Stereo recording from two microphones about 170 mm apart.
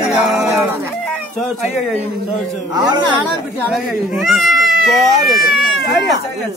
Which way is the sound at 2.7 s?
25° right (ahead or behind).